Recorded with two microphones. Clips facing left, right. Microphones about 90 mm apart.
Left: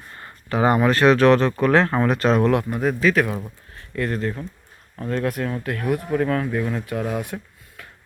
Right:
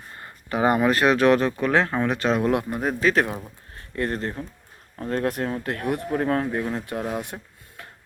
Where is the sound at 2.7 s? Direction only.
20° right (ahead or behind).